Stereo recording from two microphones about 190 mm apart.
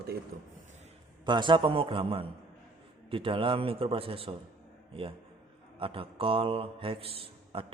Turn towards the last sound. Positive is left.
turn(degrees=-30)  # may be behind; listen again after turning